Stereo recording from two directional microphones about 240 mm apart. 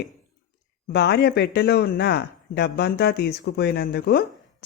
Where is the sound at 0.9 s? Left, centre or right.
Left.